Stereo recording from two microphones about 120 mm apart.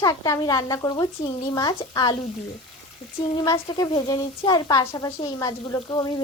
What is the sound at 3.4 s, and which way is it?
A woman's voice, 35° left (ahead or behind).